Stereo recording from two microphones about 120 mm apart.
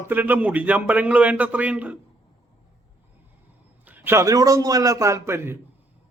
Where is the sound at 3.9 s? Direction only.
15° right (ahead or behind).